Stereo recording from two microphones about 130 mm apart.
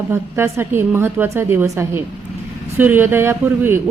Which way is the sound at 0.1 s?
20° right (ahead or behind).